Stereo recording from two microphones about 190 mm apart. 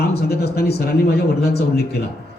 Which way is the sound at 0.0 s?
60° left (ahead or behind).